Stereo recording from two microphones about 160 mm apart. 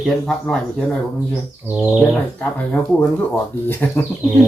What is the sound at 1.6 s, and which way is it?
Bird, 10° right (ahead or behind).